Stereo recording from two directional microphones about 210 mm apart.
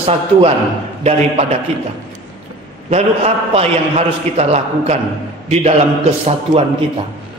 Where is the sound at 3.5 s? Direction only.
30° right (ahead or behind).